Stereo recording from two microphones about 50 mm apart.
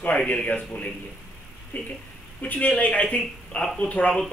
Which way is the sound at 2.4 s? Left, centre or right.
Left.